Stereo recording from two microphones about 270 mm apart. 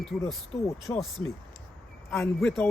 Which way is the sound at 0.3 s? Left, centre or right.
Centre.